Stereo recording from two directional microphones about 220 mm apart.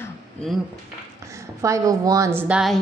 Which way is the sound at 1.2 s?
15° right (ahead or behind).